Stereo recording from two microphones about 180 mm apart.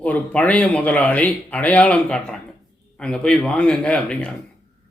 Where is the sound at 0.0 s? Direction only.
10° left (ahead or behind).